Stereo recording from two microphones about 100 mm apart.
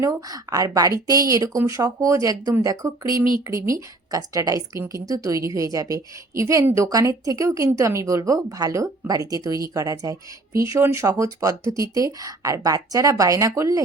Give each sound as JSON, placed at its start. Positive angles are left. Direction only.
{"t": 0.0, "sound": "a woman's voice", "side_deg": -40}